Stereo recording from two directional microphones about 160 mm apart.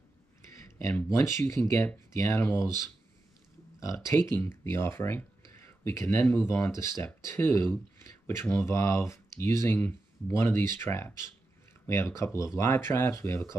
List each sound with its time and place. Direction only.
0.7 s speech: 20° left (ahead or behind)
3.8 s speech: 20° left (ahead or behind)